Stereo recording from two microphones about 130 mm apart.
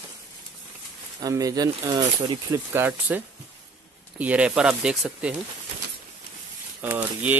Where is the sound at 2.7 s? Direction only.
15° right (ahead or behind).